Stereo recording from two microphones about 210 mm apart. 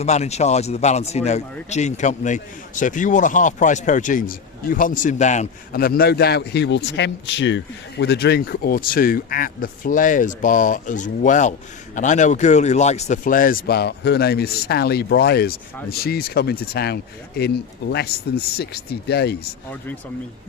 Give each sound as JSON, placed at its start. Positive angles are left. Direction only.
{"t": 0.0, "sound": "a man's voice", "side_deg": 30}